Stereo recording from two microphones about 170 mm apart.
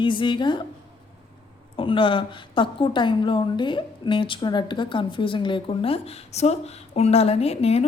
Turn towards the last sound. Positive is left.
turn(degrees=35)  # may be behind; listen again after turning